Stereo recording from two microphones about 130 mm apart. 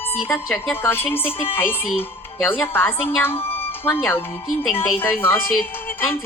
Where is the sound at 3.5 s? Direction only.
15° left (ahead or behind).